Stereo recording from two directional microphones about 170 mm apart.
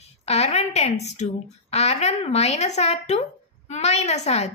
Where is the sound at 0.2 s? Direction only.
40° left (ahead or behind).